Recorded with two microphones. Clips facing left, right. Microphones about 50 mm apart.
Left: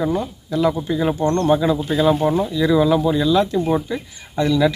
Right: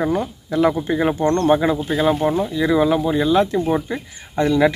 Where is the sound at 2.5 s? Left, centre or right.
Right.